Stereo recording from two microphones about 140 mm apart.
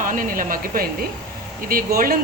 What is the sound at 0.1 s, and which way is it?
Speech, 75° right (ahead or behind).